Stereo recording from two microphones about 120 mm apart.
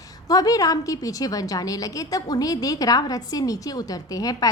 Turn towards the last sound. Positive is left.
turn(degrees=30)  # may be behind; listen again after turning